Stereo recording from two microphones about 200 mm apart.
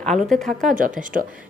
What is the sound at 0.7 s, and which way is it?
Speech, 45° right (ahead or behind).